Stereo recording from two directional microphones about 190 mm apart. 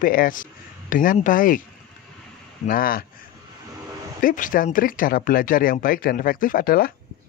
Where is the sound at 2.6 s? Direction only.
50° left (ahead or behind).